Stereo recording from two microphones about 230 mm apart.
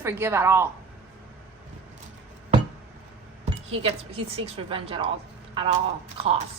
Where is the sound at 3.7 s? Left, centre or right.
Right.